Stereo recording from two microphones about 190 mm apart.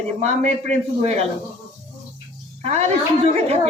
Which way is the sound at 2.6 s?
35° right (ahead or behind).